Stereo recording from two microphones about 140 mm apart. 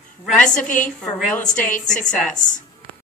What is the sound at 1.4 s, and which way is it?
Speech, 65° left (ahead or behind).